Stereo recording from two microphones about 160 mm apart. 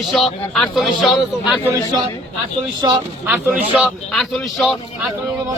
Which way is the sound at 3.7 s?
Centre (ahead or behind).